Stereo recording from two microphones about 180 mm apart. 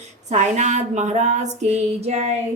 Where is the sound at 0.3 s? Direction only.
40° right (ahead or behind).